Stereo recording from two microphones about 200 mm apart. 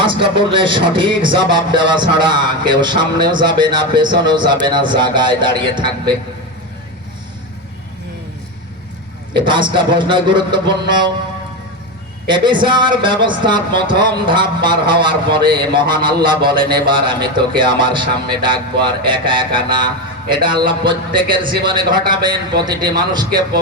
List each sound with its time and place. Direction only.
0.0 s speech: 25° right (ahead or behind)
9.3 s speech: 25° right (ahead or behind)
12.3 s speech: 25° right (ahead or behind)